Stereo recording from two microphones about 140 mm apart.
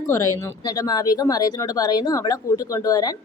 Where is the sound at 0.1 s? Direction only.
20° left (ahead or behind).